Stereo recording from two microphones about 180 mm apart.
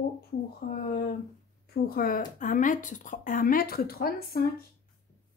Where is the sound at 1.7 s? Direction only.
55° left (ahead or behind).